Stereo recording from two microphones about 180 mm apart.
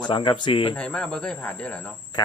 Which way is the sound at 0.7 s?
5° left (ahead or behind).